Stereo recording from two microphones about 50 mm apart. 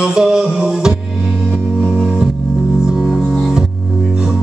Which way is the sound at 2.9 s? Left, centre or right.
Centre.